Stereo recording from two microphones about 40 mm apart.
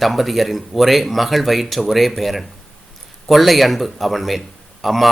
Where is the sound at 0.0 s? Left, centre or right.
Centre.